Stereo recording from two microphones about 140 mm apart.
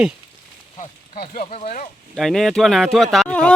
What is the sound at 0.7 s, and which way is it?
Speech, 75° left (ahead or behind).